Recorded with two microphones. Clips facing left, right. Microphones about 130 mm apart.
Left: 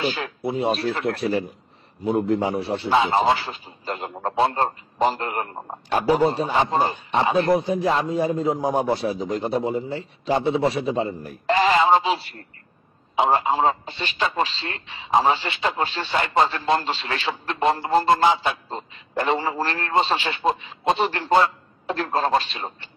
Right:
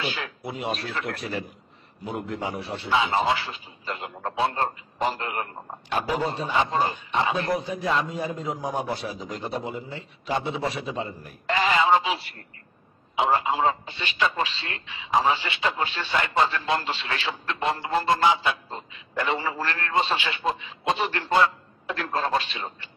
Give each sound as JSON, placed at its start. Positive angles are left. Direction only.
{"t": 0.0, "sound": "a man's voice", "side_deg": 35}